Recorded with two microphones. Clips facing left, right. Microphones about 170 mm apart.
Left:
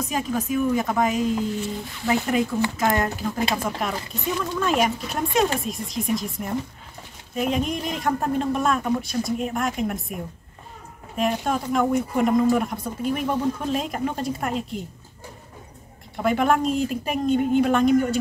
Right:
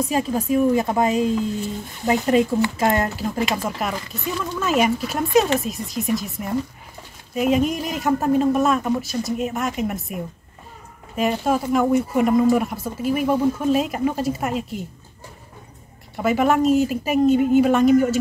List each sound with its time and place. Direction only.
0.0 s speech: 30° right (ahead or behind)
3.6 s speech: centre (ahead or behind)
16.2 s speech: 5° right (ahead or behind)